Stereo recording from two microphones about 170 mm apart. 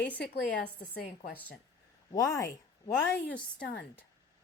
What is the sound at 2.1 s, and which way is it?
Speech, 20° left (ahead or behind).